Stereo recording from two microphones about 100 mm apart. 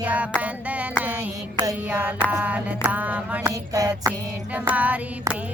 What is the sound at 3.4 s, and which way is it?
Music, 35° right (ahead or behind).